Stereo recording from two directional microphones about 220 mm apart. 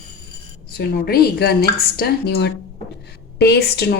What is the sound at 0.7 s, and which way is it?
Speech, 45° left (ahead or behind).